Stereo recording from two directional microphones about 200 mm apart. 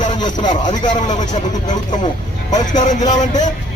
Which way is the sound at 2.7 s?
40° left (ahead or behind).